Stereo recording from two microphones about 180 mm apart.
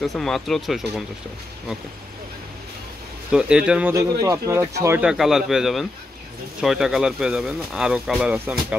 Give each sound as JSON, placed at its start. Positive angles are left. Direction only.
{"t": 0.0, "sound": "speech", "side_deg": 0}
{"t": 3.3, "sound": "speech", "side_deg": -5}
{"t": 3.9, "sound": "speech", "side_deg": -15}
{"t": 5.1, "sound": "speech", "side_deg": 0}